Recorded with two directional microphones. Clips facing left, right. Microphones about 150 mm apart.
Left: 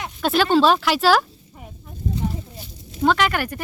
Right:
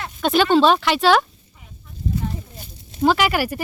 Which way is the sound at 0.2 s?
Centre (ahead or behind).